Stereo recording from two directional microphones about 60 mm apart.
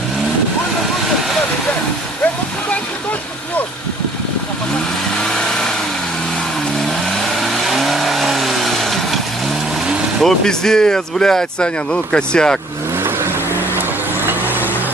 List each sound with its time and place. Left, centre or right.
5.2 s vehicle: centre
6.7 s vehicle: centre
9.8 s vehicle: centre
10.2 s speech: centre
13.0 s vehicle: right
14.3 s vehicle: right